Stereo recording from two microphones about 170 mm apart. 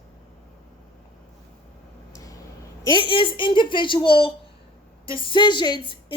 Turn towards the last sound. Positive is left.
turn(degrees=30)  # may be behind; listen again after turning